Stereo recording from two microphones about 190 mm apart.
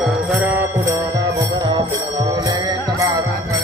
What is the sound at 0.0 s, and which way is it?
Music, 10° right (ahead or behind).